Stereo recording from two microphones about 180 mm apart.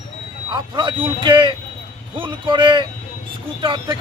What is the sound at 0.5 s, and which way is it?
Speech, 25° right (ahead or behind).